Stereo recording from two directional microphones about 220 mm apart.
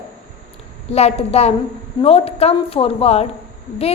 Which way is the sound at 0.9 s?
30° left (ahead or behind).